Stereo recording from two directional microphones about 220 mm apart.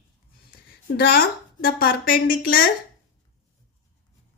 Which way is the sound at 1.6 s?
40° left (ahead or behind).